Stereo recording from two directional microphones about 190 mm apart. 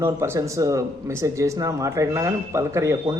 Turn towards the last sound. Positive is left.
turn(degrees=-15)  # may be behind; listen again after turning